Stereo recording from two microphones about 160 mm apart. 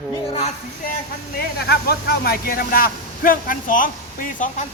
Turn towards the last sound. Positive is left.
turn(degrees=55)  # may be behind; listen again after turning